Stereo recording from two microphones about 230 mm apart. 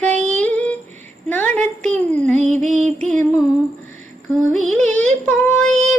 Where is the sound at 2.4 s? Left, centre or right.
Right.